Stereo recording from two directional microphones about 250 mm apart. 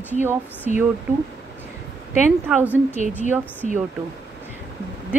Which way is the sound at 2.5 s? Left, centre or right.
Centre.